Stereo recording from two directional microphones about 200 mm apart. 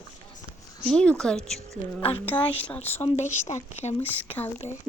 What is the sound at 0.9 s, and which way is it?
Speech, 5° left (ahead or behind).